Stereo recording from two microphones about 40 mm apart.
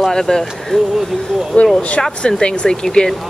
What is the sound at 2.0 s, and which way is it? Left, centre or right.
Speech, centre.